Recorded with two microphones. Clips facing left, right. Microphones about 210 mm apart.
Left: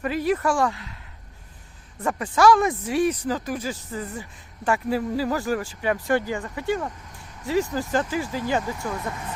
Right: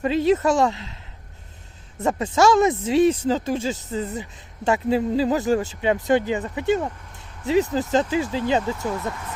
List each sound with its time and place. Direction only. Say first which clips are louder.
0.0 s speech: right 4 dB; 25° right (ahead or behind)
2.0 s speech: right 2 dB; 25° right (ahead or behind)